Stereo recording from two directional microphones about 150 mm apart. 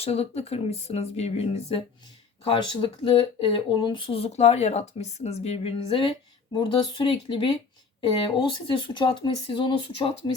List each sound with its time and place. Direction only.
0.0 s speech: 40° left (ahead or behind)